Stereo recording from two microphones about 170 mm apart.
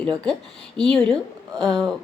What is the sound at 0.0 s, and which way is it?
Speech, 5° left (ahead or behind).